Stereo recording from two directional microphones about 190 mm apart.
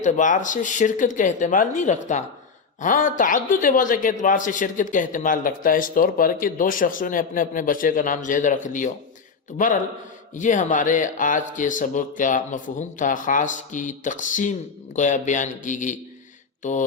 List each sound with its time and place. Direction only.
0.0 s speech: 40° left (ahead or behind)
10.3 s speech: 40° left (ahead or behind)